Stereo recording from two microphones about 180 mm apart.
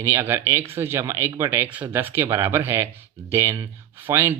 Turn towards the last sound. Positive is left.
turn(degrees=-10)  # may be behind; listen again after turning